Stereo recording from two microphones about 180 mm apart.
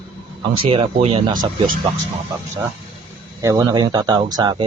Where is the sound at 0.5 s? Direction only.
30° right (ahead or behind).